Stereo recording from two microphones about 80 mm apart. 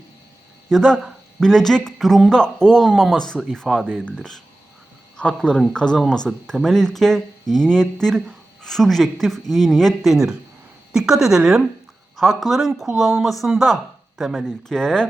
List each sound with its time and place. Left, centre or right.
0.7 s speech: centre